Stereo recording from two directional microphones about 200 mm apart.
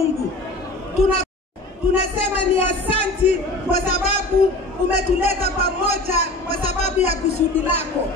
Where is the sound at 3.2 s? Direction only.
35° left (ahead or behind).